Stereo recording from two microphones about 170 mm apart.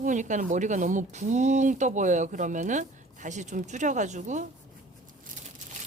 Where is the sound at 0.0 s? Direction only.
45° right (ahead or behind).